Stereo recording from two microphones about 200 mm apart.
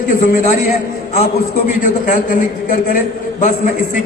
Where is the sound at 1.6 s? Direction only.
40° left (ahead or behind).